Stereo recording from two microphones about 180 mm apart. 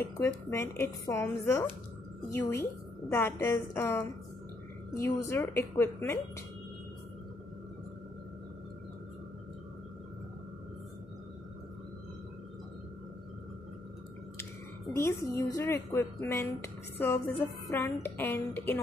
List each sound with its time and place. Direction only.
0.0 s speech: 15° left (ahead or behind)
5.2 s speech: 15° left (ahead or behind)
15.0 s speech: 15° left (ahead or behind)